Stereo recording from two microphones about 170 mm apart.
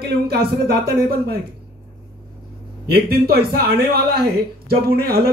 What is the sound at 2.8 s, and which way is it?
Speech, 65° right (ahead or behind).